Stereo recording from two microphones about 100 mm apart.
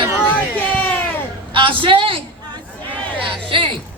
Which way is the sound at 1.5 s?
60° right (ahead or behind).